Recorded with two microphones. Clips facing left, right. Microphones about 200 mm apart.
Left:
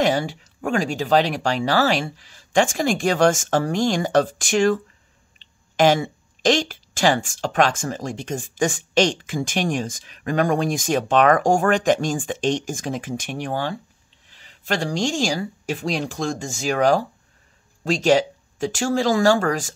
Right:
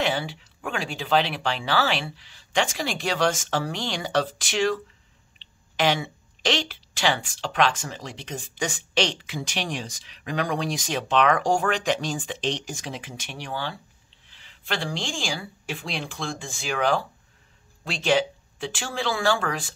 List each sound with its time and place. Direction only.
0.0 s speech: 45° left (ahead or behind)